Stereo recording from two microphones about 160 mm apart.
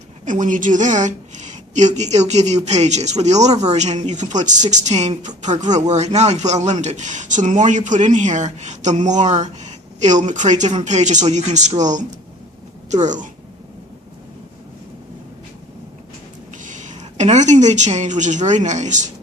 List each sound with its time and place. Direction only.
0.3 s a woman's voice: 55° right (ahead or behind)
16.6 s a woman's voice: 50° right (ahead or behind)